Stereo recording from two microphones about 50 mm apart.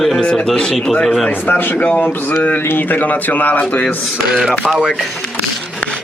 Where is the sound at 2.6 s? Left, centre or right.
Left.